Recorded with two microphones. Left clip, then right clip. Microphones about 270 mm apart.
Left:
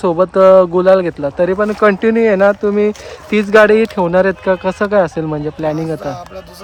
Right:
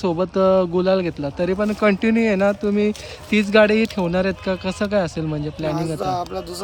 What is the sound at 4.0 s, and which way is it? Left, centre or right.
Speech, left.